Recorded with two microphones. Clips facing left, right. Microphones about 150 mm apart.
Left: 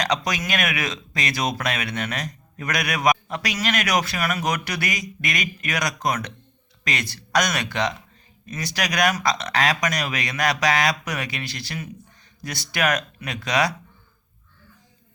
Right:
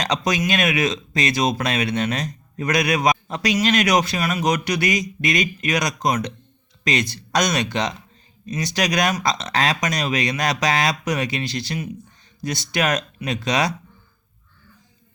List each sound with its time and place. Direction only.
0.0 s speech: 25° right (ahead or behind)